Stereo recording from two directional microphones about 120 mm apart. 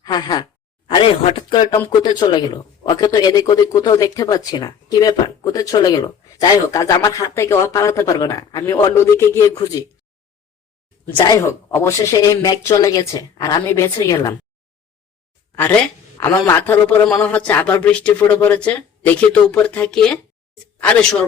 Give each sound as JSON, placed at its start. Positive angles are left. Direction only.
{"t": 0.0, "sound": "sigh", "side_deg": 35}
{"t": 0.9, "sound": "speech", "side_deg": 50}
{"t": 11.3, "sound": "speech", "side_deg": 25}
{"t": 15.5, "sound": "speech", "side_deg": 15}